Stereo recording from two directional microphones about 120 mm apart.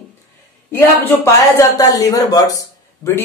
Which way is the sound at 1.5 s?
30° left (ahead or behind).